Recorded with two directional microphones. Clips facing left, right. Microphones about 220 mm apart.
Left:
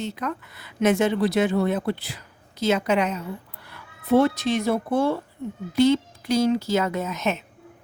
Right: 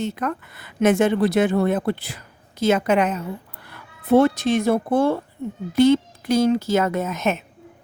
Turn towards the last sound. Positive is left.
turn(degrees=-50)  # may be behind; listen again after turning